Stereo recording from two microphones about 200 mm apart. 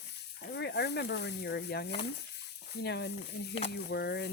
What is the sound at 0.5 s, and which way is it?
Speech, 55° left (ahead or behind).